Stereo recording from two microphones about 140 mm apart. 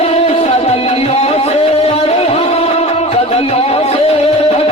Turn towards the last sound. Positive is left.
turn(degrees=45)  # may be behind; listen again after turning